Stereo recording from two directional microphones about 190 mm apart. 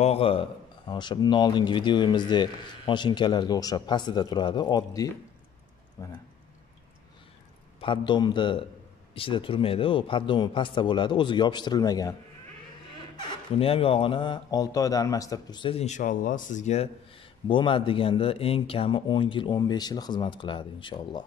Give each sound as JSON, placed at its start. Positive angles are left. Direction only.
{"t": 0.0, "sound": "a man's voice", "side_deg": 30}
{"t": 7.8, "sound": "a man's voice", "side_deg": 25}
{"t": 13.6, "sound": "a man's voice", "side_deg": 30}